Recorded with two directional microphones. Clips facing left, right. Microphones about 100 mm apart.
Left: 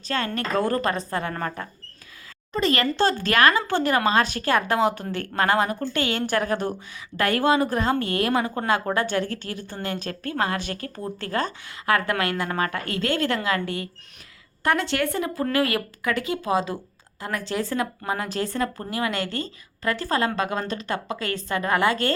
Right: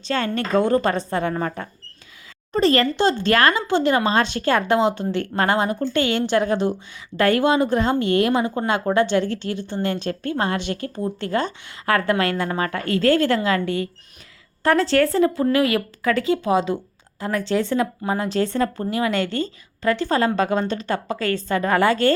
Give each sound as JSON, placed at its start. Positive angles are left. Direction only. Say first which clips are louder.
{"t": 0.0, "sound": "a woman's voice", "louder": "right 4 dB", "side_deg": -30}
{"t": 2.5, "sound": "speech", "louder": "right 6 dB", "side_deg": -35}
{"t": 2.9, "sound": "a woman's voice", "louder": "right 3 dB", "side_deg": -20}
{"t": 15.5, "sound": "a woman's voice", "louder": "right 4 dB", "side_deg": -25}